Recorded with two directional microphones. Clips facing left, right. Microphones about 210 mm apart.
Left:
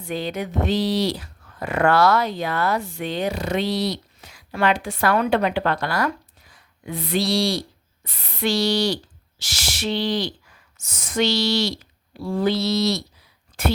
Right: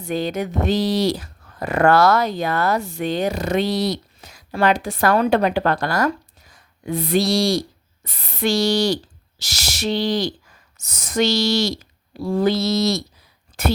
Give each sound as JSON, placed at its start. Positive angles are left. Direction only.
{"t": 0.0, "sound": "speech", "side_deg": -45}
{"t": 9.4, "sound": "a sound", "side_deg": -40}
{"t": 10.8, "sound": "speech", "side_deg": -40}